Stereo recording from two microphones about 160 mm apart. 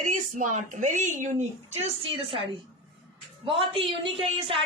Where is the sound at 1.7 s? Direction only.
40° right (ahead or behind).